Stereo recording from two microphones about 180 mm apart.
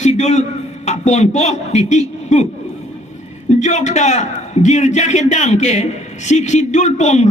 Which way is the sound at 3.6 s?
40° left (ahead or behind).